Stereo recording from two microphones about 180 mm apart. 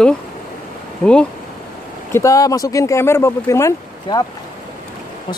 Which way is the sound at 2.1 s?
15° left (ahead or behind).